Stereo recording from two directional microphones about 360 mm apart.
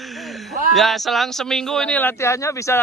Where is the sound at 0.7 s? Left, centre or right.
Centre.